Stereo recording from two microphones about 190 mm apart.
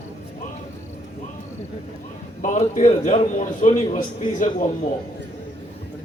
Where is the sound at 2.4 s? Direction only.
40° left (ahead or behind).